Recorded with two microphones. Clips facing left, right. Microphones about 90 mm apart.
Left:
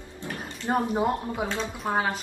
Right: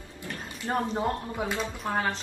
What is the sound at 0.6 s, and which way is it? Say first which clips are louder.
A woman's voice: left 3 dB; 15° left (ahead or behind).